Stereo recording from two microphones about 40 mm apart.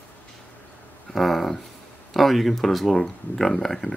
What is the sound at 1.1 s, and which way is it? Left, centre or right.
Speech, centre.